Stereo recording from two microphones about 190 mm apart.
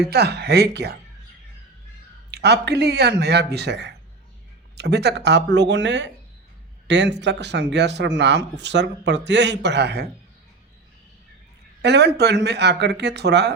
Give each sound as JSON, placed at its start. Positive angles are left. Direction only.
{"t": 0.1, "sound": "speech", "side_deg": -60}
{"t": 2.3, "sound": "speech", "side_deg": -60}
{"t": 11.8, "sound": "speech", "side_deg": -60}